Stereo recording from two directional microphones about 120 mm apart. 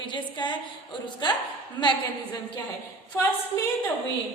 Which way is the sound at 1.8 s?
40° left (ahead or behind).